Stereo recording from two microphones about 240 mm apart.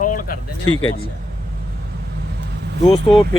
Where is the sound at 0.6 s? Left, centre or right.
Left.